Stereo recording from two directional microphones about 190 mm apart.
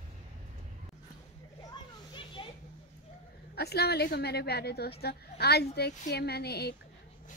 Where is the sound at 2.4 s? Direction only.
25° left (ahead or behind).